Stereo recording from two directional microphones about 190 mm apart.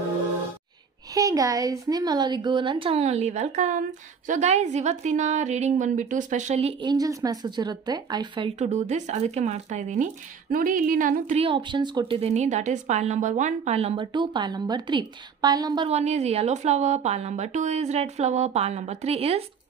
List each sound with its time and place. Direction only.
1.1 s a woman's voice: 20° right (ahead or behind)
8.5 s a woman's voice: 35° right (ahead or behind)
11.4 s a woman's voice: 25° right (ahead or behind)
15.9 s a woman's voice: 35° right (ahead or behind)